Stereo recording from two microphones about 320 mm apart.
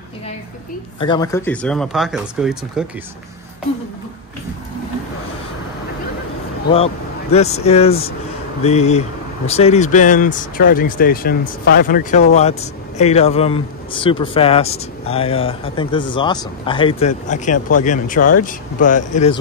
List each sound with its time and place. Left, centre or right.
0.9 s speech: centre
7.3 s speech: centre